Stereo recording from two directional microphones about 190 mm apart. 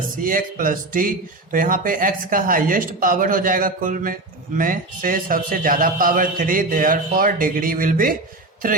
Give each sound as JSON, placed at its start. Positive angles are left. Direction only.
{"t": 0.2, "sound": "a man's voice", "side_deg": -45}